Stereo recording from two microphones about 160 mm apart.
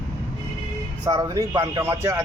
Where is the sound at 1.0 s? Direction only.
25° right (ahead or behind).